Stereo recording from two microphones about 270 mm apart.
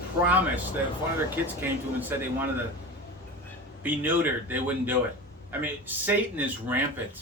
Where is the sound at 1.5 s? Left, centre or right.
Centre.